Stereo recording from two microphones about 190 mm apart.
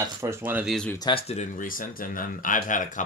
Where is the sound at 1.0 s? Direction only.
30° left (ahead or behind).